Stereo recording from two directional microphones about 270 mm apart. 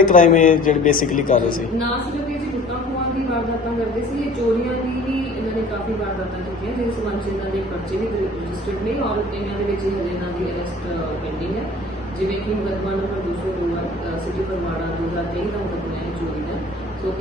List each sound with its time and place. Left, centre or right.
0.0 s a man's voice: left